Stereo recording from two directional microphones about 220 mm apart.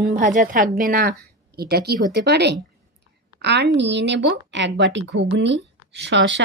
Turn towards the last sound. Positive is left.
turn(degrees=-55)  # may be behind; listen again after turning